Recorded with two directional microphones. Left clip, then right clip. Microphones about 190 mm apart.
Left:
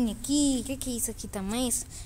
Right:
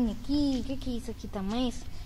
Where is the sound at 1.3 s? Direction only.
20° left (ahead or behind).